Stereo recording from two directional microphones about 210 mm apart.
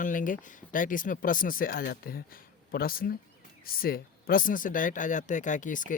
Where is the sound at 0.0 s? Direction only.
40° left (ahead or behind).